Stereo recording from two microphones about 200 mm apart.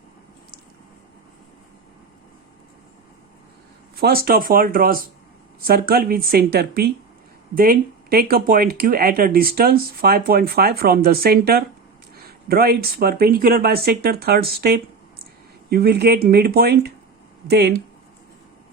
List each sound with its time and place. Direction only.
4.0 s speech: 50° right (ahead or behind)